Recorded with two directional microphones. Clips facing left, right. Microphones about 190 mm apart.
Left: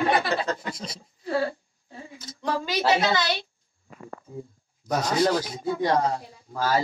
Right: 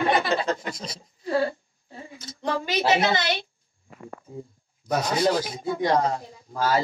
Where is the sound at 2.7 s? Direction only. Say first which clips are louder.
Right 1 dB; 15° right (ahead or behind).